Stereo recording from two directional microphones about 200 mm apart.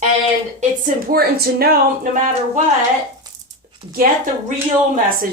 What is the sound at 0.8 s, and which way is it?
Speech, 50° right (ahead or behind).